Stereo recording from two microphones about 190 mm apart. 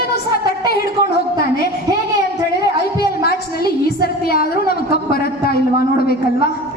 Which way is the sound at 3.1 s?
55° left (ahead or behind).